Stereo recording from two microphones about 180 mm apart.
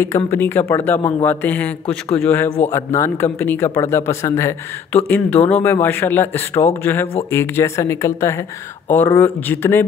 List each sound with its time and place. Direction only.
0.0 s speech: 15° left (ahead or behind)